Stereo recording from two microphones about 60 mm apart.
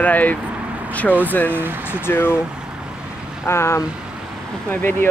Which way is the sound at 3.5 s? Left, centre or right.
Left.